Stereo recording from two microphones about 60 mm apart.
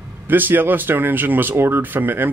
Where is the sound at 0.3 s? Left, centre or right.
Right.